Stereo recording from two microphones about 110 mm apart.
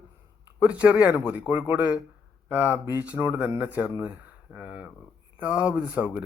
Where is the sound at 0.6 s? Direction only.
10° right (ahead or behind).